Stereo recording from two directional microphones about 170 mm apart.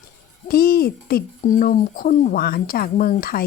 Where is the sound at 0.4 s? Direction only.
60° left (ahead or behind).